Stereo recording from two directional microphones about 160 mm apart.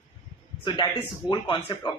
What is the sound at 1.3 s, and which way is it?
Speech, 30° left (ahead or behind).